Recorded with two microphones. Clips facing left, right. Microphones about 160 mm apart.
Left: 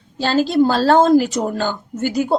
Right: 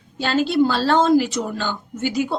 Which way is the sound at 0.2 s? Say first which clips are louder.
Left 3 dB; 35° left (ahead or behind).